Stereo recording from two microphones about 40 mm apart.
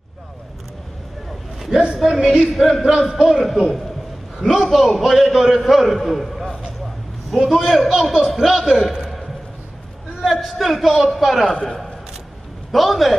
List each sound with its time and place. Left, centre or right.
2.0 s a man's voice: centre
7.3 s a man's voice: centre
10.2 s a man's voice: centre
11.4 s a man's voice: left
12.7 s a man's voice: centre